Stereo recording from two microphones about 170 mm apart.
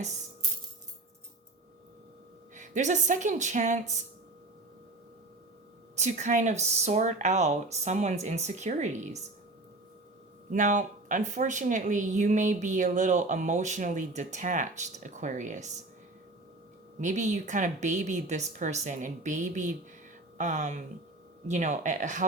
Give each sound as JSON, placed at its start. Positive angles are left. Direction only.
{"t": 2.6, "sound": "speech", "side_deg": -45}
{"t": 6.0, "sound": "speech", "side_deg": -45}
{"t": 10.5, "sound": "speech", "side_deg": -45}
{"t": 17.0, "sound": "speech", "side_deg": -45}